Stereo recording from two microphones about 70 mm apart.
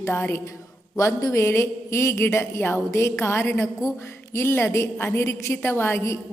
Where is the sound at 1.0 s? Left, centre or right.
Left.